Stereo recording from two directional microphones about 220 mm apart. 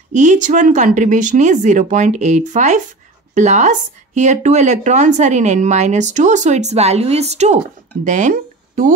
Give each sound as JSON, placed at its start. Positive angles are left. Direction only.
{"t": 0.1, "sound": "speech", "side_deg": -35}